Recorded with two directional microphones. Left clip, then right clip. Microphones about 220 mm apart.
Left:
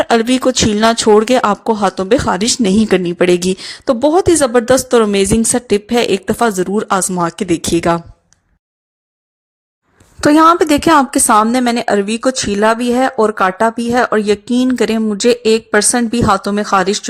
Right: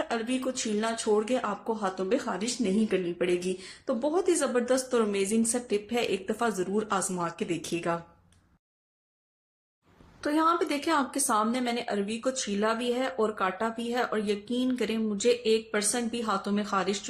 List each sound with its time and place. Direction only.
0.0 s speech: 45° left (ahead or behind)
10.2 s a woman's voice: 45° left (ahead or behind)